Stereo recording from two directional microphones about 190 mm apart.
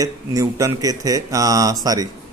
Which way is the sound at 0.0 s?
15° right (ahead or behind).